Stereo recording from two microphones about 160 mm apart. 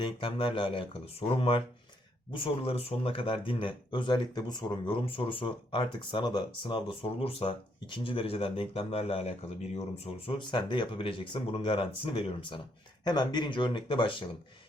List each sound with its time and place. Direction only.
0.0 s speech: 30° left (ahead or behind)